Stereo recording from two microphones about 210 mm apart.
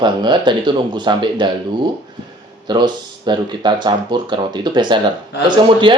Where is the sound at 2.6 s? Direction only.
20° right (ahead or behind).